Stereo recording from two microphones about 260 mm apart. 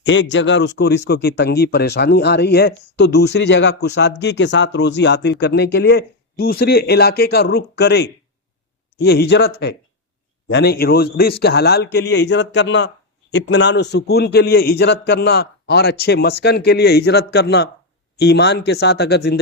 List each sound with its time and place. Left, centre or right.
0.0 s a man's voice: left